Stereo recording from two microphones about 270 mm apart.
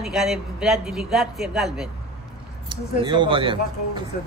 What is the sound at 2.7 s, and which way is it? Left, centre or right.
Speech, centre.